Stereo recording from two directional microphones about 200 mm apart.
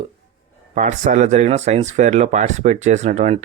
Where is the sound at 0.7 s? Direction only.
40° right (ahead or behind).